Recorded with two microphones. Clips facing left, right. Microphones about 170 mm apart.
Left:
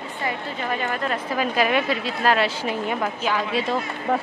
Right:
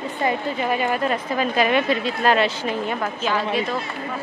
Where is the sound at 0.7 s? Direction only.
10° right (ahead or behind).